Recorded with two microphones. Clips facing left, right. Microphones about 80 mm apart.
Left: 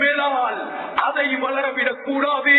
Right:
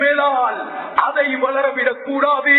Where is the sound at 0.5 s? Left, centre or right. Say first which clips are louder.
Right 4 dB; right.